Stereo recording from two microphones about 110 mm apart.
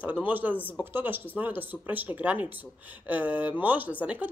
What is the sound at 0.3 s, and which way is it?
A woman's voice, 15° right (ahead or behind).